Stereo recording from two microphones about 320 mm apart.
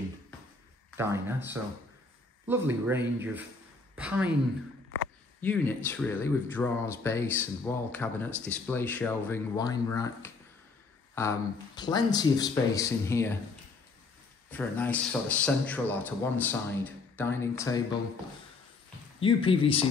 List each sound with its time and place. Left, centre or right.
0.9 s speech: centre
5.4 s speech: centre
14.5 s a man's voice: centre
19.1 s speech: centre